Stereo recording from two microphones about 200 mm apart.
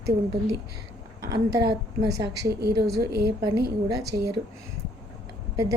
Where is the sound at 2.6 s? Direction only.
55° right (ahead or behind).